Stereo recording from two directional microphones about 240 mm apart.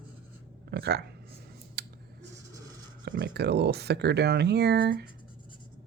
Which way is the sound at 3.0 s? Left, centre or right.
Right.